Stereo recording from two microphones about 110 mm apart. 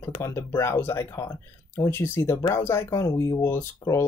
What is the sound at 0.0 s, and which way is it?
Speech, 25° left (ahead or behind).